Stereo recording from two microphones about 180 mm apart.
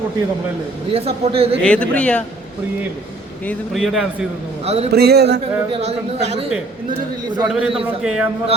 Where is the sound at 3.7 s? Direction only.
Centre (ahead or behind).